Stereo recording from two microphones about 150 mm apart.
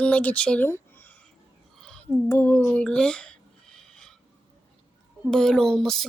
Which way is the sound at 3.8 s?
5° left (ahead or behind).